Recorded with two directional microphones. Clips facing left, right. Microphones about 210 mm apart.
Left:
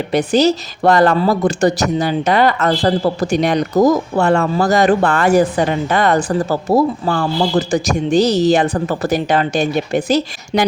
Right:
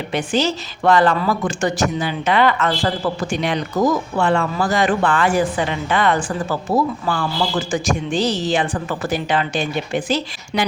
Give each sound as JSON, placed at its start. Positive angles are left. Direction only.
{"t": 0.1, "sound": "a woman's voice", "side_deg": 40}